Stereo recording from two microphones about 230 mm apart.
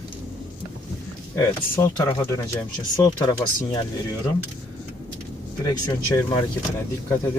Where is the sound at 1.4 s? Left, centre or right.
Centre.